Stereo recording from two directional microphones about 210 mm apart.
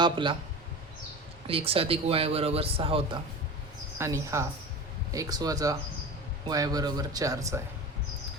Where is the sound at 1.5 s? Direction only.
25° right (ahead or behind).